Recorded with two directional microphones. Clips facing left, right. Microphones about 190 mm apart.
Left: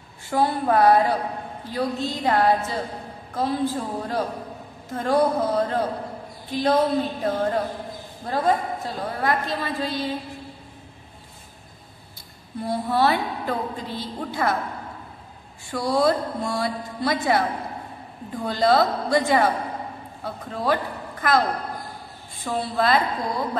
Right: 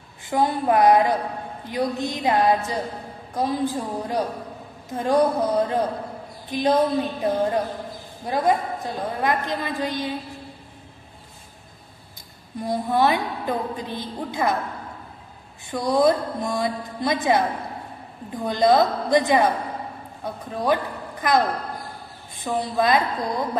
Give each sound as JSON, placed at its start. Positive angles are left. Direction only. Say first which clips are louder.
{"t": 0.2, "sound": "a woman's voice", "louder": "even", "side_deg": -20}
{"t": 12.6, "sound": "a woman's voice", "louder": "right 1 dB", "side_deg": -15}
{"t": 15.6, "sound": "a woman's voice", "louder": "right 2 dB", "side_deg": -20}